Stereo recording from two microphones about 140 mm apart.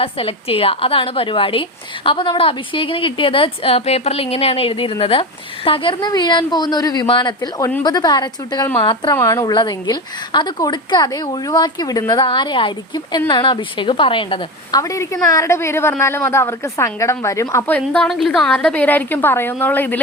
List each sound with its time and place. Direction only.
0.0 s a woman's voice: 40° left (ahead or behind)
9.1 s a woman's voice: 20° left (ahead or behind)
9.5 s a woman's voice: 30° left (ahead or behind)
14.8 s a woman's voice: 20° left (ahead or behind)